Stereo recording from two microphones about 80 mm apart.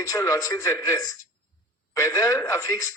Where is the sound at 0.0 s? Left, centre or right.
Left.